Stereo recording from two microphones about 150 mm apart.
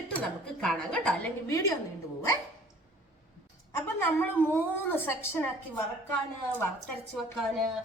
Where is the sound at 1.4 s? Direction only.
20° left (ahead or behind).